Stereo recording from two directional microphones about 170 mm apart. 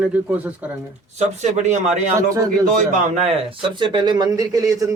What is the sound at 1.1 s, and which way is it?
Speech, 45° right (ahead or behind).